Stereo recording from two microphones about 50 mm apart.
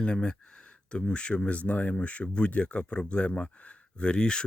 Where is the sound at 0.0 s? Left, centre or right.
Centre.